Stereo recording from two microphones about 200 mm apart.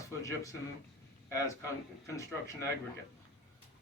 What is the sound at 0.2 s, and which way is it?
A man's voice, 15° left (ahead or behind).